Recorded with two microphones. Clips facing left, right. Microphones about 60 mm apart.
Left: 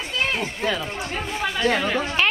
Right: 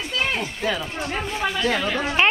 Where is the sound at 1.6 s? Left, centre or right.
Centre.